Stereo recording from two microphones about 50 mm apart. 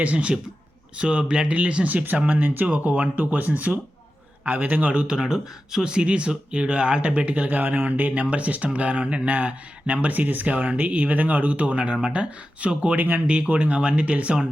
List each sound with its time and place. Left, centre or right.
0.0 s speech: right
13.0 s speech: right
13.2 s speech: right